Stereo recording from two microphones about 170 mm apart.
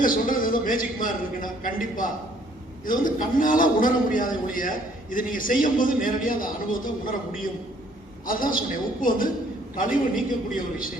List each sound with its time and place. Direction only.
0.0 s a man's voice: 55° left (ahead or behind)